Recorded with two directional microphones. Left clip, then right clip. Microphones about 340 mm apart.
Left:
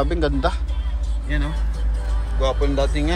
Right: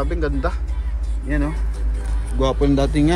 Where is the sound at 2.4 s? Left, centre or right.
Centre.